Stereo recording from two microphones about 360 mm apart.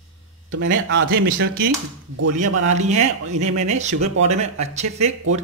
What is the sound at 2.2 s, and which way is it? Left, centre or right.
Speech, right.